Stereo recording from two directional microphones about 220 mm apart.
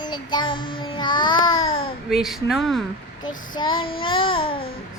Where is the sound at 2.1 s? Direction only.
Centre (ahead or behind).